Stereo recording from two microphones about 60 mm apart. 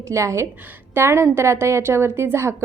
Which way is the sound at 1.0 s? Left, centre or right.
Right.